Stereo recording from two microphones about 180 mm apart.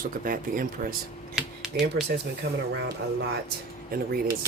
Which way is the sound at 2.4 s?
65° right (ahead or behind).